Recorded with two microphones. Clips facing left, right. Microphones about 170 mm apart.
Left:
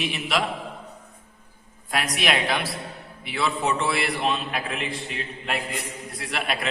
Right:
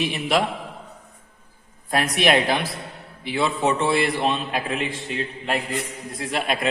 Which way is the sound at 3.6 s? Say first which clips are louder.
Right 6 dB; 25° right (ahead or behind).